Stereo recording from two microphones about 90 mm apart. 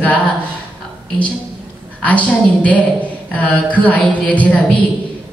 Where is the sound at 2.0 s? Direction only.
15° left (ahead or behind).